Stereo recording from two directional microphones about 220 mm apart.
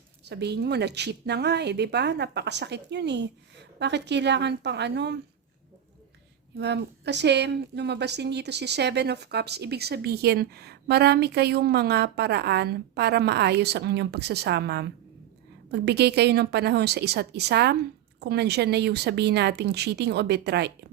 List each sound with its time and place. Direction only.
0.3 s a woman's voice: 50° right (ahead or behind)
6.6 s a woman's voice: 50° right (ahead or behind)